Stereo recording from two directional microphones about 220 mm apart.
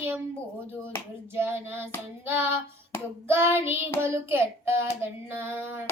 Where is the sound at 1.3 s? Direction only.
10° right (ahead or behind).